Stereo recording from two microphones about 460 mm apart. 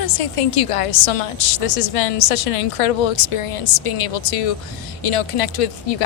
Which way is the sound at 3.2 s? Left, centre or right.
Left.